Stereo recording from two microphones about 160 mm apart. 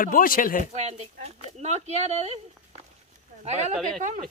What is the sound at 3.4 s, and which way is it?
Speech, 45° right (ahead or behind).